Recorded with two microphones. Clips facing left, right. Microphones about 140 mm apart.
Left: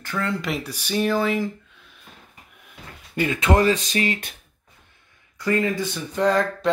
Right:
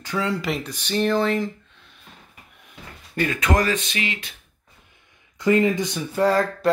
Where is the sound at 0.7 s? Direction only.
10° left (ahead or behind).